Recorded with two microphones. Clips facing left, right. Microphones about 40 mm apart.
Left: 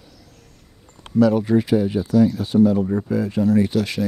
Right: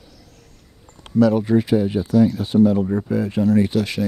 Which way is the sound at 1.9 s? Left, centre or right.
Centre.